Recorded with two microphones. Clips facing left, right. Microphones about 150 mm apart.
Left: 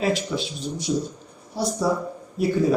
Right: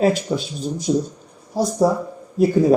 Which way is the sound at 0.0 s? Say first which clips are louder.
Right 5 dB; 45° right (ahead or behind).